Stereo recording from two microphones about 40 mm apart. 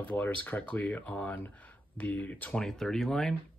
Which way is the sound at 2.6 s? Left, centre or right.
Centre.